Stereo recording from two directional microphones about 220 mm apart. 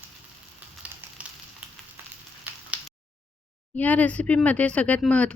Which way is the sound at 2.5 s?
10° right (ahead or behind).